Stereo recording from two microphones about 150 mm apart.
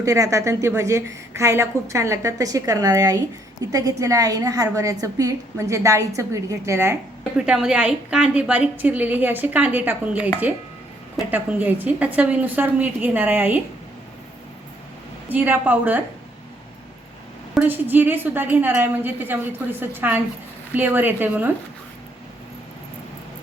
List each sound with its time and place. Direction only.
0.0 s a woman's voice: 20° right (ahead or behind)
7.3 s a woman's voice: 5° right (ahead or behind)
11.3 s a woman's voice: 15° right (ahead or behind)
15.3 s a woman's voice: 10° right (ahead or behind)
17.5 s a woman's voice: 10° right (ahead or behind)